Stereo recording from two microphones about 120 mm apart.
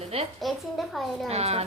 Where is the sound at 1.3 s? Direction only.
60° right (ahead or behind).